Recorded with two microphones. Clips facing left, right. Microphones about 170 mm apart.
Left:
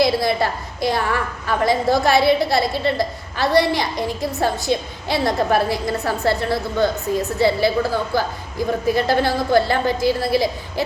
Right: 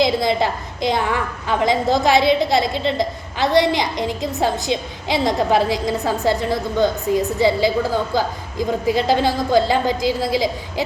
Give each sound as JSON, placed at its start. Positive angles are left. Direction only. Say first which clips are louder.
{"t": 0.0, "sound": "a woman's voice", "louder": "even", "side_deg": -20}